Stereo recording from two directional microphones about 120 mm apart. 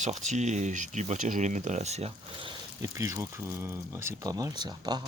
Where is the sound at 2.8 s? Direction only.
25° right (ahead or behind).